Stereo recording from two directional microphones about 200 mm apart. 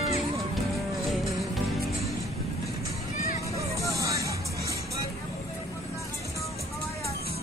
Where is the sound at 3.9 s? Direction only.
15° right (ahead or behind).